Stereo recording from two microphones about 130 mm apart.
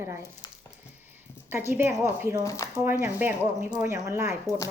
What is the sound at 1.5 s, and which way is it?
Speech, 15° right (ahead or behind).